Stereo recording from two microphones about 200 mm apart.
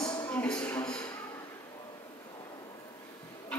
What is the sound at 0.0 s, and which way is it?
Music, 20° left (ahead or behind).